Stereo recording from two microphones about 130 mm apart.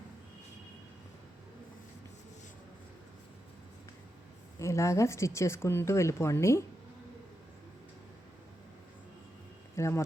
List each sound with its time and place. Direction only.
4.6 s a woman's voice: 20° left (ahead or behind)
9.7 s speech: 20° left (ahead or behind)